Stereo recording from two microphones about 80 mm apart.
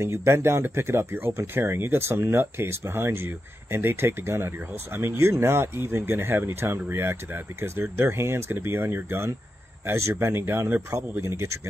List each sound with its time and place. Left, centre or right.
0.0 s speech: right